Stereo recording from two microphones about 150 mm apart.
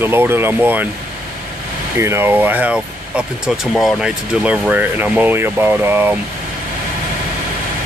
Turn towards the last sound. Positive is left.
turn(degrees=-15)  # may be behind; listen again after turning